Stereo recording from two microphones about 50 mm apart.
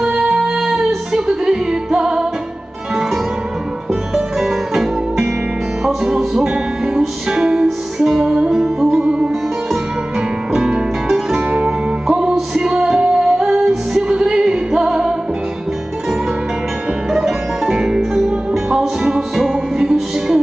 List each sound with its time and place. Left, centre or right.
0.2 s music: centre
4.1 s music: centre
10.5 s music: centre
12.6 s music: centre
17.1 s music: centre